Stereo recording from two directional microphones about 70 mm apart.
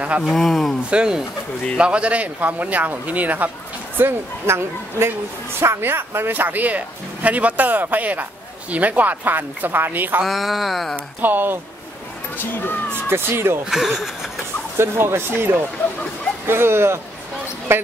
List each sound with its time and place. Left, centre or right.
0.2 s a sound: centre
0.8 s a man's voice: centre
4.0 s a man's voice: right
10.2 s a sound: centre
11.1 s a man's voice: right
12.4 s speech: left
13.1 s speech: right
13.7 s a sound: centre
14.8 s speech: right
15.8 s speech: left
16.4 s speech: right